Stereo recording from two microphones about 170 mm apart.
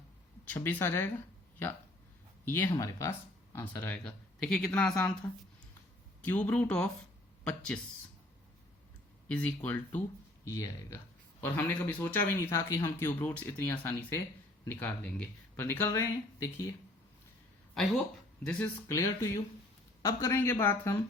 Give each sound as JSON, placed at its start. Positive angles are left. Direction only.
{"t": 0.4, "sound": "a man's voice", "side_deg": 10}
{"t": 9.3, "sound": "a man's voice", "side_deg": 10}
{"t": 18.4, "sound": "a man's voice", "side_deg": 15}